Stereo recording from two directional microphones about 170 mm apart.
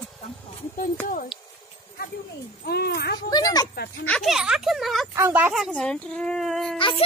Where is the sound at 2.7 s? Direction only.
70° left (ahead or behind).